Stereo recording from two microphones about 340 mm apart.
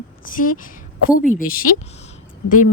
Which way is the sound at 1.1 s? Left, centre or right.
Left.